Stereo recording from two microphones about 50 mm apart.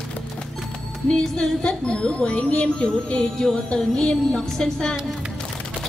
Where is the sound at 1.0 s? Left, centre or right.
Centre.